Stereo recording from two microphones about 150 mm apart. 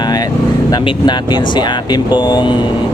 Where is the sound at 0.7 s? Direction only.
30° left (ahead or behind).